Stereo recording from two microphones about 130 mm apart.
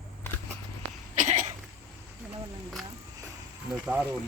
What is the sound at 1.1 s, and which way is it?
Cough, 75° right (ahead or behind).